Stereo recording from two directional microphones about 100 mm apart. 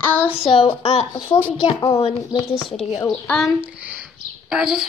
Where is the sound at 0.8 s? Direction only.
90° left.